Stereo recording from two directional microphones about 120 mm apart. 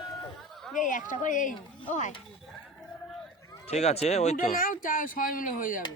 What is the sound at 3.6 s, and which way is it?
Speech, 65° left (ahead or behind).